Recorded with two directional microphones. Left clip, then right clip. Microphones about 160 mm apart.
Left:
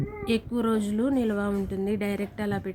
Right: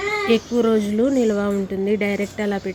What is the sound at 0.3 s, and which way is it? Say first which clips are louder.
Speech: right 7 dB; 15° right (ahead or behind).